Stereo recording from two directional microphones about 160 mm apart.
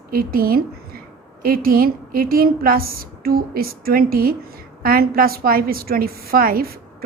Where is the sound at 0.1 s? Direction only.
65° right (ahead or behind).